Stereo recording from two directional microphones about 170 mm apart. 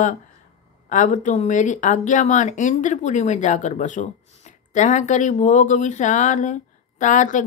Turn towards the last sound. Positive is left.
turn(degrees=50)  # may be behind; listen again after turning